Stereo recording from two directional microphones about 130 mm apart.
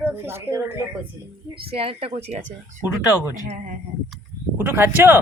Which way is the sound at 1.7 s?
45° right (ahead or behind).